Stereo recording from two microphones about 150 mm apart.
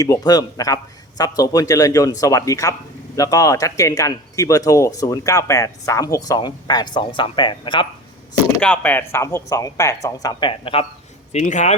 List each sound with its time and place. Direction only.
0.0 s speech: 25° left (ahead or behind)
8.6 s speech: 10° left (ahead or behind)
10.5 s speech: 35° left (ahead or behind)
11.3 s speech: 50° left (ahead or behind)